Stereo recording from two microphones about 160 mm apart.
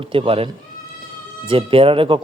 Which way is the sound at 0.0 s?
35° right (ahead or behind).